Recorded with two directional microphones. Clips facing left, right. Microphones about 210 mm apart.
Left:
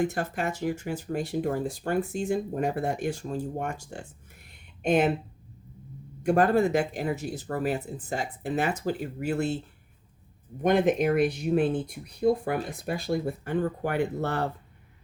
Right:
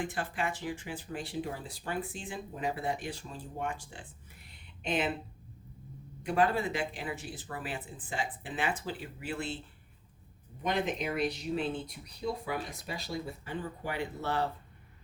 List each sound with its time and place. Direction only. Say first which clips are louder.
0.0 s speech: left 7 dB; 45° left (ahead or behind)
6.2 s speech: left 7 dB; 45° left (ahead or behind)
10.6 s speech: left 10 dB; 50° left (ahead or behind)